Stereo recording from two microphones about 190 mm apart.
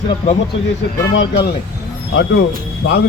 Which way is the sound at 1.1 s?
80° left.